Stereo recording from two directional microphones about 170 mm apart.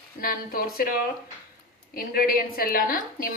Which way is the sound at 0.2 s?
60° left (ahead or behind).